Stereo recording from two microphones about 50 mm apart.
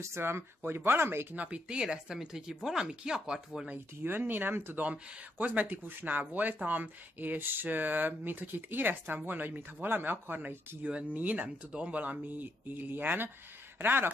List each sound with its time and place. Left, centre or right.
0.2 s speech: right
1.3 s speech: right
4.0 s speech: right
5.4 s speech: right